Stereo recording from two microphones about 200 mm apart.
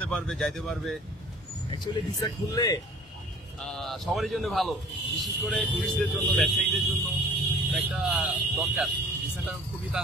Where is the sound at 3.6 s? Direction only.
Centre (ahead or behind).